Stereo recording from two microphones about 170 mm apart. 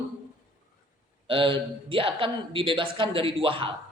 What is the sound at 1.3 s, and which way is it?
A man's voice, 30° right (ahead or behind).